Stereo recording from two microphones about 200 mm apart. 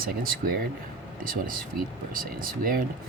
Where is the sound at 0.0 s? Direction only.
45° right (ahead or behind).